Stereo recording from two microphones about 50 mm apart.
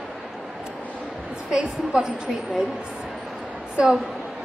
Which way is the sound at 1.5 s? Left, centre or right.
Centre.